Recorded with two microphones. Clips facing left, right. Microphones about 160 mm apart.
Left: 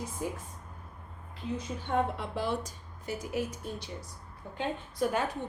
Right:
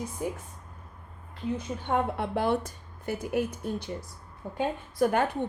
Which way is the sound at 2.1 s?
60° right (ahead or behind).